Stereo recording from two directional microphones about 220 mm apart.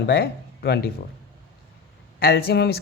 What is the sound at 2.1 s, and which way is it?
Speech, 45° left (ahead or behind).